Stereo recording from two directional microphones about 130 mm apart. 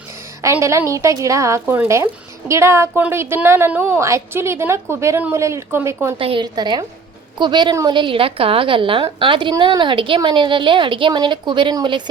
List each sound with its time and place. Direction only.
0.4 s a woman's voice: 25° right (ahead or behind)
6.1 s a woman's voice: 45° right (ahead or behind)